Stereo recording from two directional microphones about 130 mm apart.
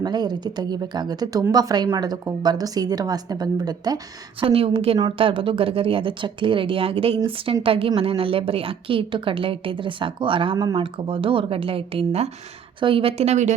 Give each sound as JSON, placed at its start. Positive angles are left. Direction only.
{"t": 0.0, "sound": "a woman's voice", "side_deg": -35}
{"t": 4.4, "sound": "a woman's voice", "side_deg": -45}